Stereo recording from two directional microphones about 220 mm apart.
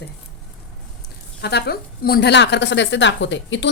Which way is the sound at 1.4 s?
50° left (ahead or behind).